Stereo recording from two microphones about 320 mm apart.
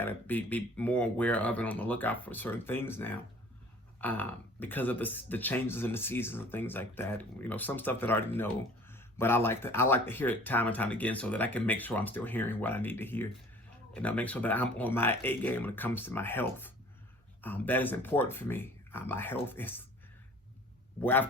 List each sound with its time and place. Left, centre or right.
0.0 s speech: centre
21.0 s speech: centre